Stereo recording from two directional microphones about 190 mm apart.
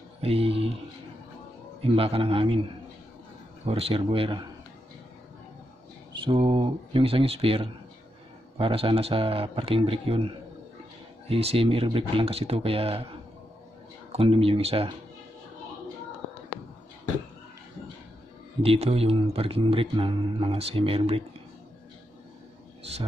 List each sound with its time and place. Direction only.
0.2 s speech: 30° right (ahead or behind)
1.8 s speech: 30° right (ahead or behind)
3.6 s speech: 30° right (ahead or behind)
6.1 s speech: 25° right (ahead or behind)
14.1 s speech: 30° right (ahead or behind)
18.6 s speech: 30° right (ahead or behind)